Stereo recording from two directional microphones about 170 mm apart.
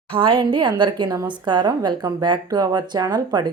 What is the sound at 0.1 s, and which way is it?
A woman's voice, 30° right (ahead or behind).